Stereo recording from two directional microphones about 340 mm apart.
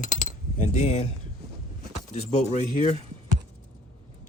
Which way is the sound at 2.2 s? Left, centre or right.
Centre.